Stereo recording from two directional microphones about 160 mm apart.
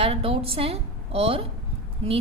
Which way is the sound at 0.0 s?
35° right (ahead or behind).